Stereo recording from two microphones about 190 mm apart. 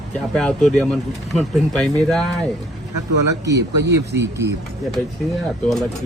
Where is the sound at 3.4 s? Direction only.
65° right (ahead or behind).